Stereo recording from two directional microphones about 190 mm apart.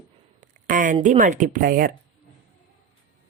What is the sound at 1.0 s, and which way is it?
Speech, 40° right (ahead or behind).